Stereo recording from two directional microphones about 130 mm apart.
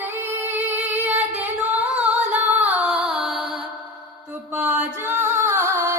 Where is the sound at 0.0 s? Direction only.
15° right (ahead or behind).